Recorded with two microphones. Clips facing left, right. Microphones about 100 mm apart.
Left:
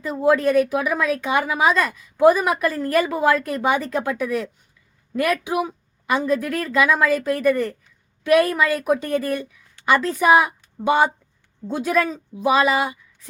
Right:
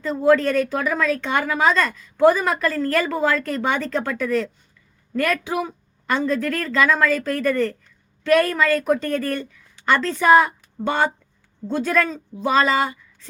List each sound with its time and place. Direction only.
0.0 s a woman's voice: 10° left (ahead or behind)